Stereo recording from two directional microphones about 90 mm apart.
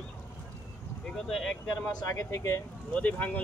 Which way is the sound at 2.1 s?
35° left (ahead or behind).